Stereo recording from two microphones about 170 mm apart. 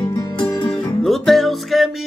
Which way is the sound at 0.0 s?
25° left (ahead or behind).